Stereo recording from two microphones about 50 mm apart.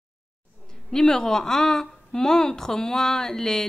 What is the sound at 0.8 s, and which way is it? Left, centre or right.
Speech, centre.